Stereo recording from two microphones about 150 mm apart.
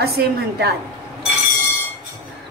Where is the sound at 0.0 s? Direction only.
90° right.